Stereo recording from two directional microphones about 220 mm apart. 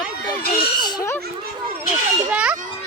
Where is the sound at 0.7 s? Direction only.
15° left (ahead or behind).